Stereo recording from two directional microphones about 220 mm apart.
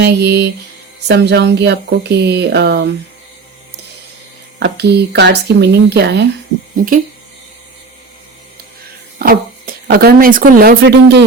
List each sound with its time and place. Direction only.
0.0 s speech: 50° right (ahead or behind)
4.6 s speech: 50° right (ahead or behind)
9.1 s speech: 40° right (ahead or behind)